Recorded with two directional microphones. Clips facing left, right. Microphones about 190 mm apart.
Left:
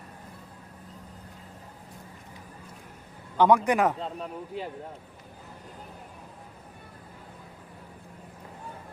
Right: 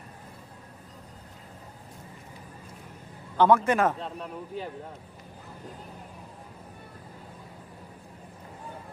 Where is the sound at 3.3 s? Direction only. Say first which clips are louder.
Even; 15° left (ahead or behind).